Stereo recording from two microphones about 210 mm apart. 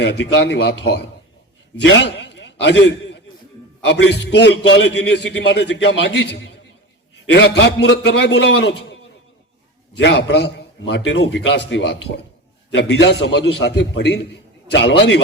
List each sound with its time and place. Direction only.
0.0 s a man's voice: 55° left (ahead or behind)
10.0 s a man's voice: 55° left (ahead or behind)